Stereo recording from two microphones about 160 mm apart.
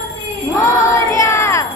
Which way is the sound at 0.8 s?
20° left (ahead or behind).